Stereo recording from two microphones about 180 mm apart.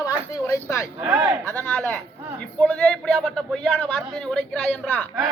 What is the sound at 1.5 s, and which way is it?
A man's voice, 10° left (ahead or behind).